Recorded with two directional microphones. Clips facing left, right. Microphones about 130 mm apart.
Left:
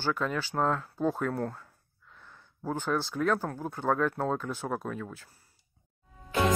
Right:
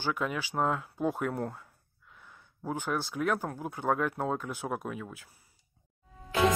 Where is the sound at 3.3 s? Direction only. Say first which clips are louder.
Left 2 dB; 15° right (ahead or behind).